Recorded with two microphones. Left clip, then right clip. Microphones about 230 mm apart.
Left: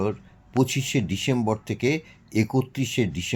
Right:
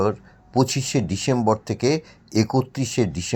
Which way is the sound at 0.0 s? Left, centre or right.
Centre.